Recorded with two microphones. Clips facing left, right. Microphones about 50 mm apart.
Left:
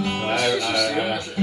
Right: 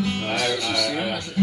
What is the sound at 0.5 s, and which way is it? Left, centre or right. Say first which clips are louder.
Speech: left 3 dB; left.